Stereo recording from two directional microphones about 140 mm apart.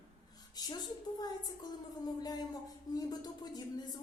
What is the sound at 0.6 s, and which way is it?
A woman's voice, 30° left (ahead or behind).